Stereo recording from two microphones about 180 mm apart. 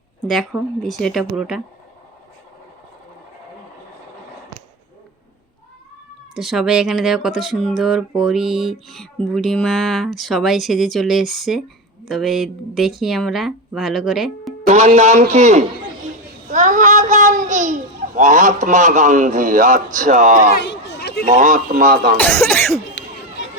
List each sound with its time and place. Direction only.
0.8 s speech: centre (ahead or behind)
6.3 s speech: centre (ahead or behind)
14.7 s a man's voice: 40° right (ahead or behind)
20.7 s a sound: 65° left (ahead or behind)
21.3 s speech: 45° right (ahead or behind)
22.2 s speech: 10° left (ahead or behind)